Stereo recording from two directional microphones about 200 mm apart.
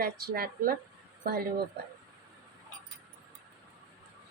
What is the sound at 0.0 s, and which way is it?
Speech, 50° right (ahead or behind).